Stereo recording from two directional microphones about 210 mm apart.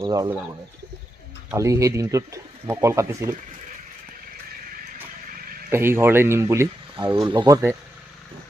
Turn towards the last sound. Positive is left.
turn(degrees=-15)  # may be behind; listen again after turning